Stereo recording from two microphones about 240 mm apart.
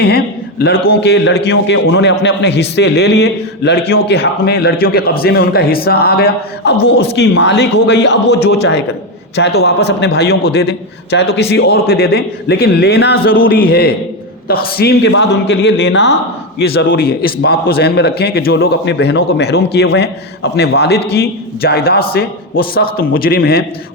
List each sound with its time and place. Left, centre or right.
0.9 s a man's voice: left